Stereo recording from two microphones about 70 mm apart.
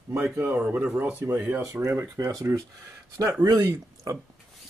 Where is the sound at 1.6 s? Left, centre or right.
Right.